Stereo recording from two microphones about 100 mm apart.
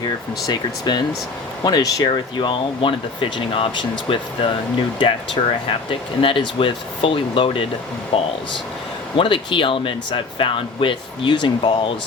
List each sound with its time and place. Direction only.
0.4 s speech: 45° left (ahead or behind)
2.0 s speech: 55° left (ahead or behind)